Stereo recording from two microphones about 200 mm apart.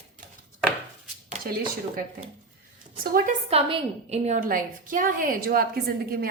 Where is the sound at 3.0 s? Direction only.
45° right (ahead or behind).